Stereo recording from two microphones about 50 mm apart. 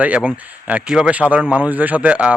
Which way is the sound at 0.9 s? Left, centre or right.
Centre.